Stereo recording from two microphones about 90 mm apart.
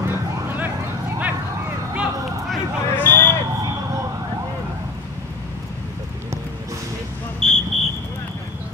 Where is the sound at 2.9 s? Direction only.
20° left (ahead or behind).